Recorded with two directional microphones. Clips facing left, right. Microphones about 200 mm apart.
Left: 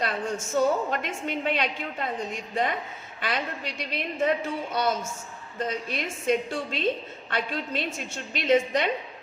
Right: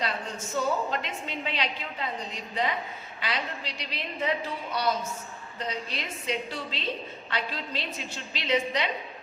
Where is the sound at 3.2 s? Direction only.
50° left (ahead or behind).